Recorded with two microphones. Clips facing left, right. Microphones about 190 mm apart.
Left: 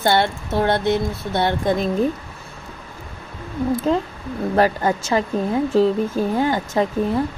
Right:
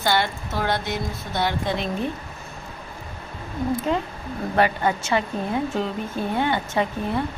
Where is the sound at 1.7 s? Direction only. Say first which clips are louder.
Left 7 dB; 40° left (ahead or behind).